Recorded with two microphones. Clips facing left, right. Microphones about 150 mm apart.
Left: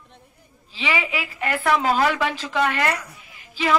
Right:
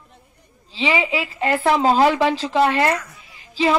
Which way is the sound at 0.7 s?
30° right (ahead or behind).